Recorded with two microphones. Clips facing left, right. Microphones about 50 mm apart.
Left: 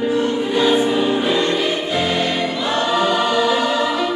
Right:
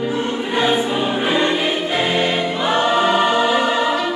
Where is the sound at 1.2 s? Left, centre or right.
Right.